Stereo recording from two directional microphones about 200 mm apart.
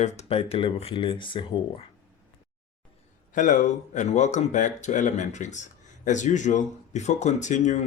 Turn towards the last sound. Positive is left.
turn(degrees=35)  # may be behind; listen again after turning